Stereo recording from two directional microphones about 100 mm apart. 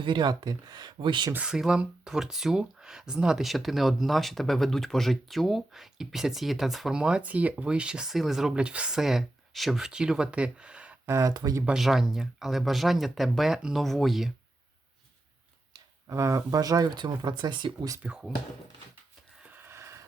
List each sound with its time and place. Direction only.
0.0 s speech: 50° right (ahead or behind)
1.3 s speech: 10° right (ahead or behind)
11.0 s speech: 30° right (ahead or behind)
11.6 s speech: 5° right (ahead or behind)
16.0 s speech: 30° right (ahead or behind); by 17.7 s 50° right (ahead or behind)
18.0 s speech: 10° right (ahead or behind)
19.4 s a sound: 20° right (ahead or behind)